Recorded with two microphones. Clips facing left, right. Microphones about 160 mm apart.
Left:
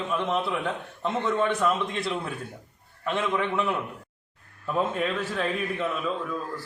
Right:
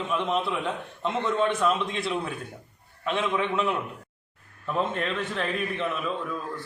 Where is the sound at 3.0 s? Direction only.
Centre (ahead or behind).